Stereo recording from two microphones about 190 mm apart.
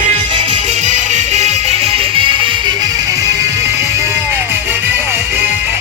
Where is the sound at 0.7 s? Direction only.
40° right (ahead or behind); by 4.7 s 15° right (ahead or behind).